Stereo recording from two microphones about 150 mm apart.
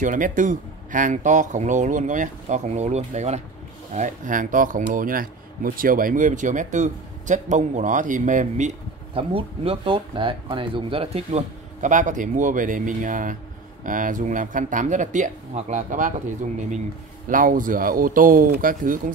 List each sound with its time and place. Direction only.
0.0 s speech: 60° right (ahead or behind)
9.1 s speech: 40° right (ahead or behind); by 18.9 s 70° right (ahead or behind)